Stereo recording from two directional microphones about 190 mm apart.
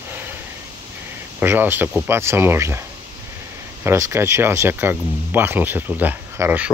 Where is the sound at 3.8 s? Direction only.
15° right (ahead or behind).